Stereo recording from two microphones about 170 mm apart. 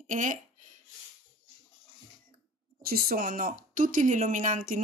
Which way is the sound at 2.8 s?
60° right (ahead or behind).